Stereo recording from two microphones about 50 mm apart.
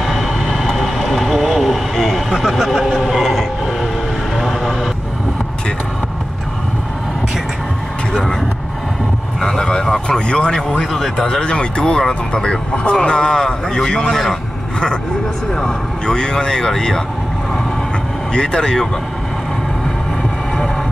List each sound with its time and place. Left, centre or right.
0.0 s vehicle: centre
8.1 s vehicle: centre
9.4 s a sound: centre
10.9 s a sound: centre
11.2 s speech: centre
15.6 s speech: centre
18.3 s speech: centre